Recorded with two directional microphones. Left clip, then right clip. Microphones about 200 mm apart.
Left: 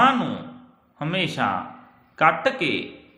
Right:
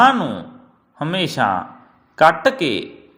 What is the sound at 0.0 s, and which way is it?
A man's voice, 25° right (ahead or behind).